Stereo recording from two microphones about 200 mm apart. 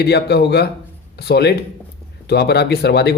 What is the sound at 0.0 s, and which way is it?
Speech, 55° left (ahead or behind).